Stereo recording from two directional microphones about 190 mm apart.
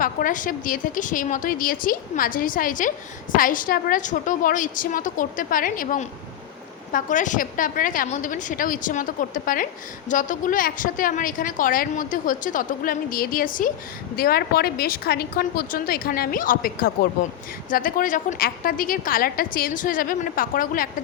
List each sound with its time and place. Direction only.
0.0 s a woman's voice: 45° left (ahead or behind)